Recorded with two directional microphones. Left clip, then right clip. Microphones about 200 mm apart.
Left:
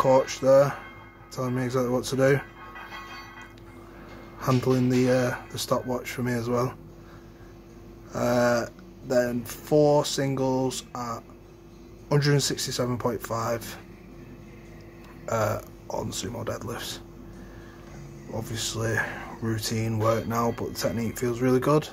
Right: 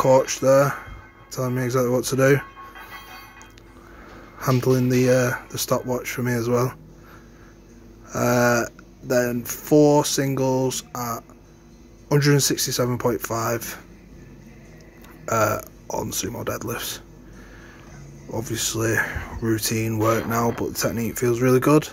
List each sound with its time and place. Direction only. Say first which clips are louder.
0.0 s speech: right 4 dB; 15° right (ahead or behind)
4.4 s speech: right 4 dB; 15° right (ahead or behind)
8.1 s speech: right 4 dB; 20° right (ahead or behind)
15.2 s speech: right 5 dB; 15° right (ahead or behind)
18.3 s speech: right 5 dB; 20° right (ahead or behind)